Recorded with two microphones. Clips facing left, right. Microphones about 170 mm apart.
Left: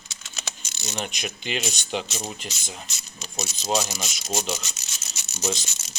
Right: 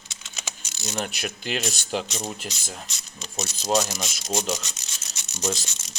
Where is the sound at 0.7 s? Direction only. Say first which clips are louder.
Right 2 dB; centre (ahead or behind).